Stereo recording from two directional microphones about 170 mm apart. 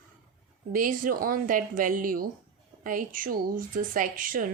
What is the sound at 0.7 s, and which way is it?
Speech, 55° right (ahead or behind).